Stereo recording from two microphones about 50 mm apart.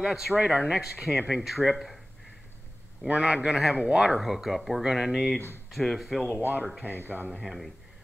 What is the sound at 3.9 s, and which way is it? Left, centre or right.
Speech, centre.